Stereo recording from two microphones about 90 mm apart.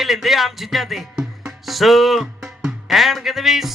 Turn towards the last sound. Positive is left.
turn(degrees=0)  # may be behind; listen again after turning